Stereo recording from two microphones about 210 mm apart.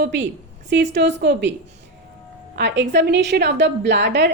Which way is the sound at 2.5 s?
55° right (ahead or behind).